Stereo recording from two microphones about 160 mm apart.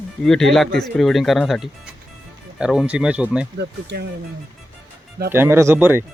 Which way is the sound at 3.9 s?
90° right.